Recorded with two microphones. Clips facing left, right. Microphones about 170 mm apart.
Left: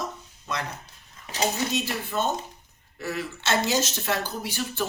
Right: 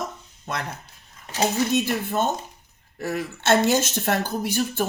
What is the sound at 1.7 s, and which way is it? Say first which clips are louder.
Speech: right 5 dB; 50° right (ahead or behind).